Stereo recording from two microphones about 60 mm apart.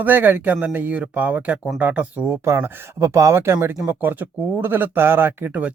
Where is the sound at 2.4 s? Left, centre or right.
Right.